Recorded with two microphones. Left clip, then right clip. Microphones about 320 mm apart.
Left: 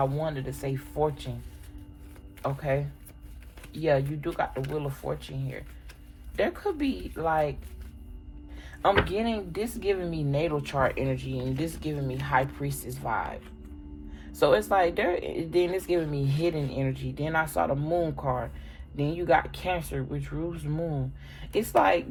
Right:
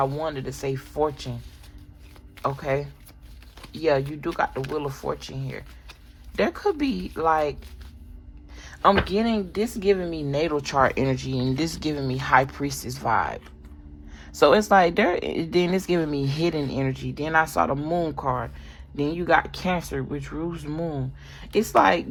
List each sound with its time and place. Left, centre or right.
0.0 s speech: right
2.4 s speech: right
8.5 s a sound: right
9.0 s speech: right